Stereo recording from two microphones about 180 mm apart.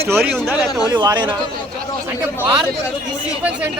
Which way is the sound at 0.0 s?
15° right (ahead or behind).